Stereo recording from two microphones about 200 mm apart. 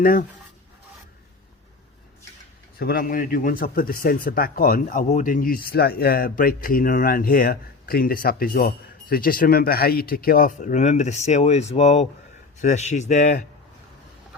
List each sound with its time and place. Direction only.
0.0 s speech: 45° left (ahead or behind)
2.7 s speech: 50° left (ahead or behind)